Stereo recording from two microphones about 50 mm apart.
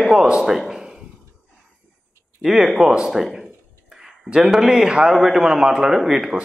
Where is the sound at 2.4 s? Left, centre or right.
Centre.